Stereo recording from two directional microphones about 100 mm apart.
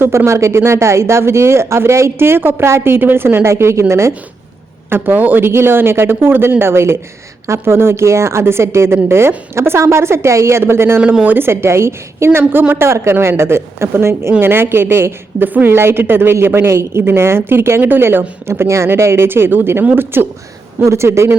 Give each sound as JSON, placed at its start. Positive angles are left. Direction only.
{"t": 0.0, "sound": "a woman's voice", "side_deg": -25}
{"t": 11.0, "sound": "speech", "side_deg": -10}
{"t": 11.3, "sound": "a woman's voice", "side_deg": -25}